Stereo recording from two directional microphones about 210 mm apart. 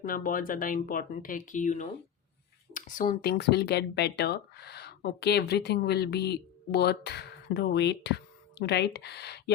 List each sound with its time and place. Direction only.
0.0 s speech: 40° left (ahead or behind)